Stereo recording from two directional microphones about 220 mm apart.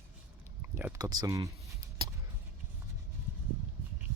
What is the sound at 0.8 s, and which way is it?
Speech, 15° right (ahead or behind).